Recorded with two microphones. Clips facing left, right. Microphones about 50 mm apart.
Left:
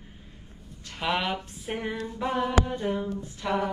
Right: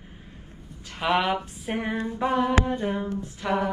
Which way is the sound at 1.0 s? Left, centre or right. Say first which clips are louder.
Right 4 dB; centre.